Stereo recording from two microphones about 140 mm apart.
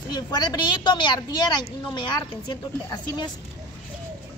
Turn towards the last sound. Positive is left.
turn(degrees=30)  # may be behind; listen again after turning